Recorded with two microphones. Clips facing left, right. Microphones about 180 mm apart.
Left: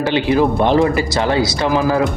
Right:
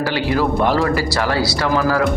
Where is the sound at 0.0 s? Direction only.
20° left (ahead or behind).